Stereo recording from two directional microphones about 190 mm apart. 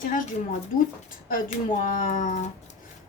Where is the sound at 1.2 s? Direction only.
45° left (ahead or behind).